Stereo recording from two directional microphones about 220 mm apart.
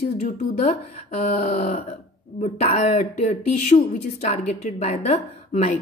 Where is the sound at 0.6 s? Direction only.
30° left (ahead or behind).